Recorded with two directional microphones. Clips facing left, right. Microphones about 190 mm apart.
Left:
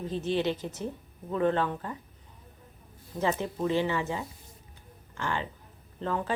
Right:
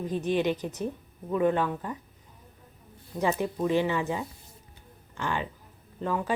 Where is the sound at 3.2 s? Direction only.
15° right (ahead or behind).